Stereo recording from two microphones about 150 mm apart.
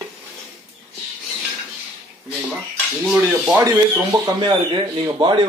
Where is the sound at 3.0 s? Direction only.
5° right (ahead or behind).